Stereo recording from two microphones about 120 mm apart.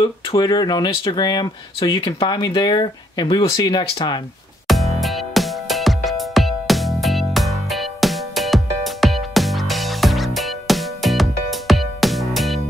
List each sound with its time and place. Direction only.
0.4 s speech: 35° left (ahead or behind)
4.6 s music: centre (ahead or behind)